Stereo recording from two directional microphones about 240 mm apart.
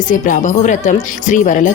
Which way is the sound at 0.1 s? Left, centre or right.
Left.